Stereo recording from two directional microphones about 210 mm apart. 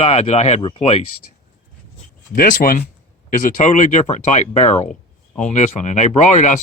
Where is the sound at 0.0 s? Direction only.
30° left (ahead or behind).